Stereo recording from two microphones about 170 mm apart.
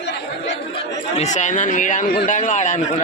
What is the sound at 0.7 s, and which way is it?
Speech, 40° left (ahead or behind).